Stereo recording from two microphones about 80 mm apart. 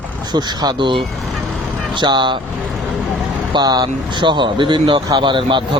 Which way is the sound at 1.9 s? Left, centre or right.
Right.